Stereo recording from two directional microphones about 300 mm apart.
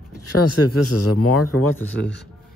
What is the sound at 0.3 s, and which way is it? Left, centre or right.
Speech, left.